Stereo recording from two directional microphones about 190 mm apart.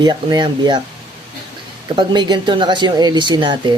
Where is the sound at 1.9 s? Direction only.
25° right (ahead or behind).